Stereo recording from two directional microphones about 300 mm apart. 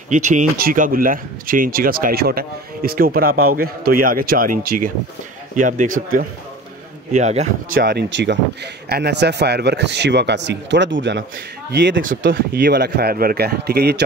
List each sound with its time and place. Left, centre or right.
0.1 s speech: right
7.1 s speech: right